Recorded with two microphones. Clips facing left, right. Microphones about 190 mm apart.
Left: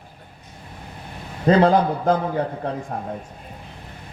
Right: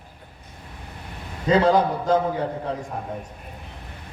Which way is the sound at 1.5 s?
55° left (ahead or behind).